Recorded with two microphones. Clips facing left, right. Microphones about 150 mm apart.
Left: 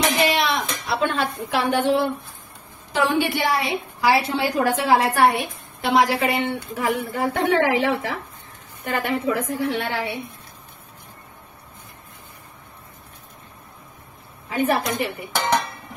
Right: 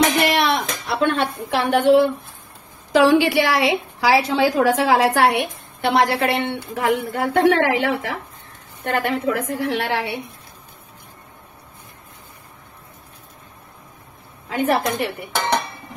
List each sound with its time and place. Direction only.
0.2 s a sound: 60° right (ahead or behind)
0.8 s speech: 65° right (ahead or behind)
2.9 s a woman's voice: 90° right
14.5 s speech: 80° right